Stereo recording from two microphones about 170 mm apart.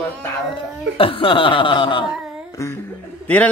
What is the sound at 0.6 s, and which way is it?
Speech, 30° left (ahead or behind).